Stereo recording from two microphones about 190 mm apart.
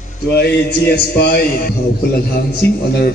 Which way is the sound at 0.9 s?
55° left (ahead or behind).